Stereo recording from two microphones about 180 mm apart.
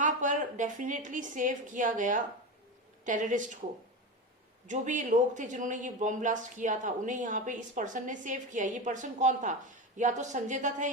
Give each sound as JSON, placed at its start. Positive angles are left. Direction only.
{"t": 0.0, "sound": "a woman's voice", "side_deg": -45}
{"t": 4.6, "sound": "speech", "side_deg": -45}